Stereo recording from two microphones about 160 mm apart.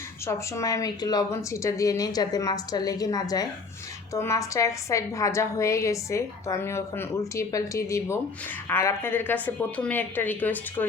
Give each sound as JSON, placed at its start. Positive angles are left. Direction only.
{"t": 0.3, "sound": "a woman's voice", "side_deg": 20}